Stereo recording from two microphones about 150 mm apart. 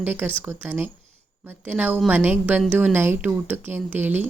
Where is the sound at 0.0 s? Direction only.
10° right (ahead or behind).